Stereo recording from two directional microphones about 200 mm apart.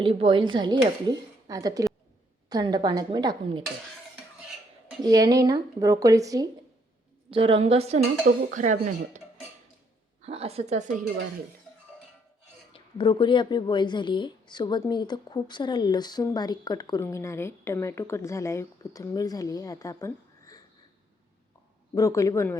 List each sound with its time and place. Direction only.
0.0 s speech: 25° right (ahead or behind)
4.9 s speech: 20° right (ahead or behind)
7.3 s speech: 25° right (ahead or behind)
10.2 s speech: 30° right (ahead or behind)
12.7 s speech: 25° left (ahead or behind)
21.9 s speech: 15° left (ahead or behind)